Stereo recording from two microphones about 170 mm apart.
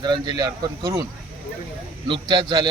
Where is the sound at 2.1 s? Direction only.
25° right (ahead or behind).